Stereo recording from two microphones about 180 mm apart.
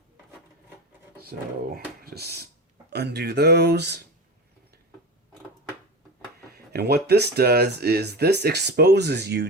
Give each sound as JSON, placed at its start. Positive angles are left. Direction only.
{"t": 1.1, "sound": "speech", "side_deg": -60}
{"t": 6.5, "sound": "speech", "side_deg": -60}